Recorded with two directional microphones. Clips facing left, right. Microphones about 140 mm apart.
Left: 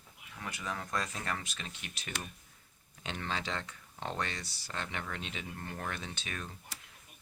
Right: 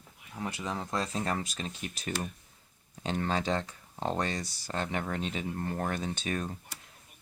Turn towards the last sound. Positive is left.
turn(degrees=-40)  # may be behind; listen again after turning